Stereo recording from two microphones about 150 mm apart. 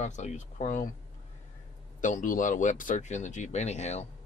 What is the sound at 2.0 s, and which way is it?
Speech, 60° left (ahead or behind).